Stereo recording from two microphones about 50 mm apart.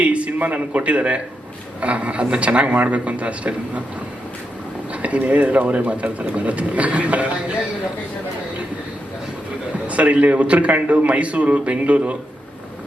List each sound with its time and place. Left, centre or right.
0.0 s a man's voice: right
5.0 s a man's voice: right
9.8 s a man's voice: right